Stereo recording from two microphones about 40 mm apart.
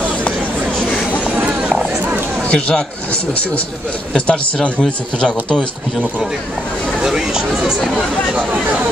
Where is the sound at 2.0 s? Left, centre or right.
Right.